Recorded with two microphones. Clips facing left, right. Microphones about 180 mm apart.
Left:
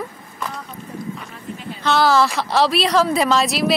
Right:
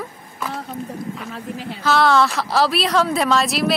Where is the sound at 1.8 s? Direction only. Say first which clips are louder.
Even; centre (ahead or behind).